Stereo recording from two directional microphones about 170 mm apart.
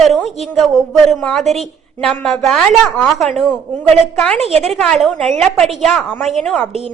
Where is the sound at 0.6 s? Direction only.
Centre (ahead or behind).